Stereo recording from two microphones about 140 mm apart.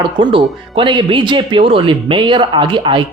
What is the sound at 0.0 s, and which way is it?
Speech, 35° right (ahead or behind).